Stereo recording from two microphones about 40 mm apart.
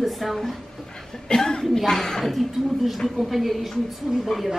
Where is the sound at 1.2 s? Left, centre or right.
Centre.